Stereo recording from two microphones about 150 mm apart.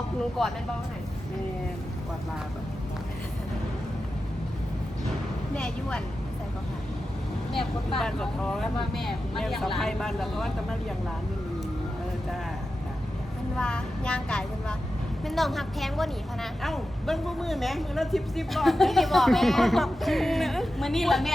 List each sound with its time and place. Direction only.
0.4 s a woman's voice: centre (ahead or behind)
5.5 s a woman's voice: 5° left (ahead or behind)
7.9 s a woman's voice: 5° left (ahead or behind)
13.6 s a woman's voice: 5° left (ahead or behind)